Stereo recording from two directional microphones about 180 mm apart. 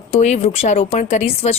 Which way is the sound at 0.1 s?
40° left (ahead or behind).